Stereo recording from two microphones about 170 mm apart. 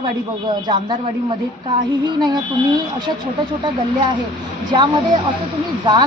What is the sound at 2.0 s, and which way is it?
Speech, 25° right (ahead or behind).